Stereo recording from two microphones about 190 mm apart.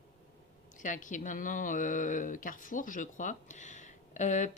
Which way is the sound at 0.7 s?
40° left (ahead or behind).